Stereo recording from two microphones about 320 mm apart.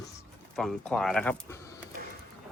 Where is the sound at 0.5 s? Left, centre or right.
Centre.